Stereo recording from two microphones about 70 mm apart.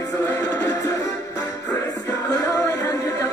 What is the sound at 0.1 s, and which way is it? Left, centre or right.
Music, left.